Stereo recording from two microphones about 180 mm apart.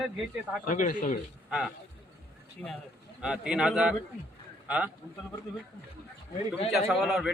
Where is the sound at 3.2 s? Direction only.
5° right (ahead or behind).